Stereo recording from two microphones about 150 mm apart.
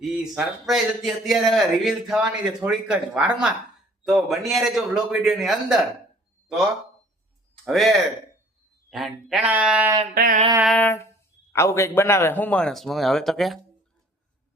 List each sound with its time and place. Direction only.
0.0 s a man's voice: 5° right (ahead or behind)
7.6 s a man's voice: centre (ahead or behind)
10.2 s a sound: 70° right (ahead or behind)
10.8 s a man's voice: 15° left (ahead or behind)